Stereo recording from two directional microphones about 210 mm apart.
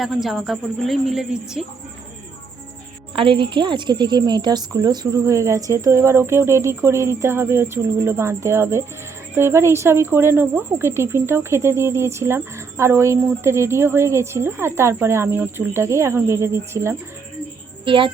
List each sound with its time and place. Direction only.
0.0 s a woman's voice: centre (ahead or behind)
3.2 s a woman's voice: 25° right (ahead or behind)
17.8 s a woman's voice: 25° right (ahead or behind)